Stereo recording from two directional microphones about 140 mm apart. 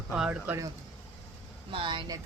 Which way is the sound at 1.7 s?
35° right (ahead or behind).